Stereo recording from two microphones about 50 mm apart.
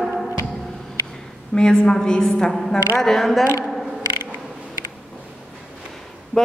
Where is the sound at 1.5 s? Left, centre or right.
Centre.